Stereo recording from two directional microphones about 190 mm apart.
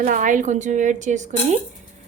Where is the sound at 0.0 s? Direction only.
45° right (ahead or behind).